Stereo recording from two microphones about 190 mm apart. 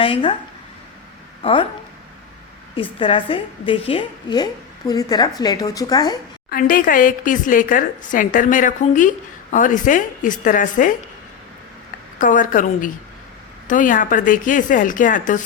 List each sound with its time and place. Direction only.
0.0 s speech: 30° left (ahead or behind)
1.4 s a woman's voice: 25° left (ahead or behind)
3.0 s a woman's voice: 25° left (ahead or behind)
6.5 s speech: 45° left (ahead or behind)
12.2 s speech: 45° left (ahead or behind)